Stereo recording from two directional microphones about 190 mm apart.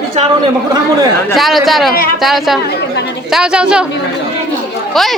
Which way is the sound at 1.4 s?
Centre (ahead or behind).